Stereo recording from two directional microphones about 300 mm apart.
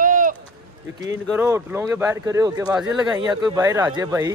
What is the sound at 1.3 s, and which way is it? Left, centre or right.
Speech, centre.